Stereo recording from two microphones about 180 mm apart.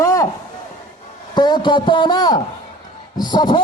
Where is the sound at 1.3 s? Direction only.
25° left (ahead or behind).